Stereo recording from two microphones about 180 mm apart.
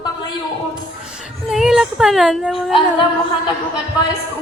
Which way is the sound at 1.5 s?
Centre (ahead or behind).